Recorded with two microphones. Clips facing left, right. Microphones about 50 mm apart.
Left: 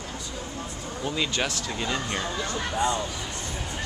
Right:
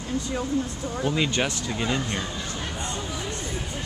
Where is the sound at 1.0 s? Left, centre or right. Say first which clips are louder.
Right 3 dB; centre.